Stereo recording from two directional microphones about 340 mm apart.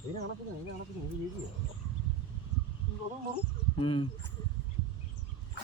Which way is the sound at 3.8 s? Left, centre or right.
Centre.